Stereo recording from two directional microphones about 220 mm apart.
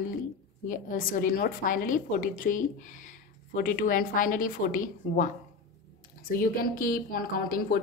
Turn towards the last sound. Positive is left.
turn(degrees=40)  # may be behind; listen again after turning